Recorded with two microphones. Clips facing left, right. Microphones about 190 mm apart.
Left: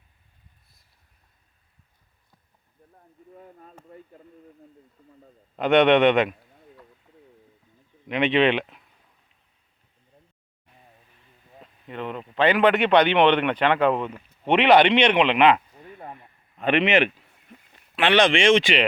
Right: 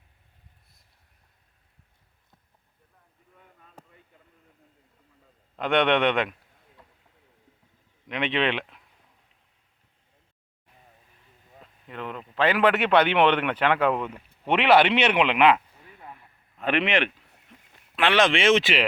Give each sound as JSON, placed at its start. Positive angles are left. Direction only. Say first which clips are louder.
{"t": 2.9, "sound": "speech", "louder": "left 12 dB", "side_deg": 40}
{"t": 5.5, "sound": "speech", "louder": "left 5 dB", "side_deg": 0}
{"t": 8.0, "sound": "speech", "louder": "left 6 dB", "side_deg": 0}
{"t": 11.6, "sound": "speech", "louder": "left 3 dB", "side_deg": 0}